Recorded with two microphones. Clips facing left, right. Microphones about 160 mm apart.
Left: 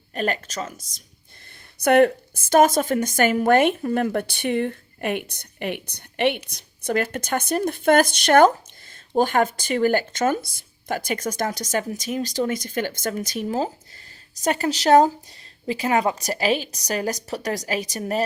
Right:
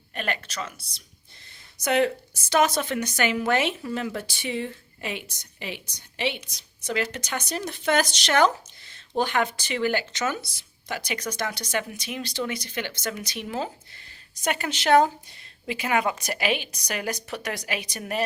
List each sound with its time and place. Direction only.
0.1 s a woman's voice: 40° left (ahead or behind)
1.8 s a woman's voice: 55° left (ahead or behind); by 18.3 s 35° left (ahead or behind)